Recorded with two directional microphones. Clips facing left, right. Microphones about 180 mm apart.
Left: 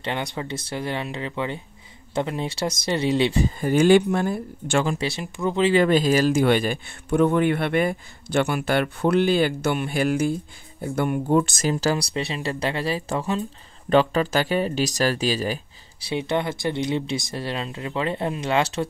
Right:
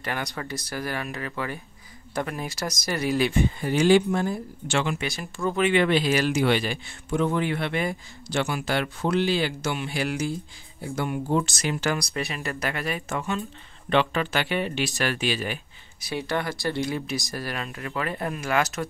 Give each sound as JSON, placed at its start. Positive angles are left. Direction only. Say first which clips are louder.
{"t": 0.0, "sound": "speech", "louder": "left 3 dB", "side_deg": 25}
{"t": 4.8, "sound": "speech", "louder": "left 3 dB", "side_deg": 35}
{"t": 5.2, "sound": "speech", "louder": "left 2 dB", "side_deg": 20}
{"t": 5.7, "sound": "speech", "louder": "left 4 dB", "side_deg": 40}
{"t": 11.6, "sound": "speech", "louder": "left 4 dB", "side_deg": 35}